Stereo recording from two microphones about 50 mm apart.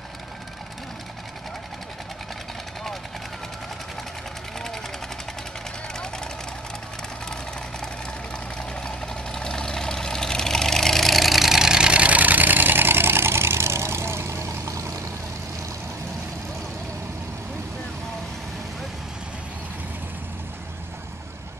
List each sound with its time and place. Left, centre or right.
8.5 s vehicle: centre; by 14.9 s right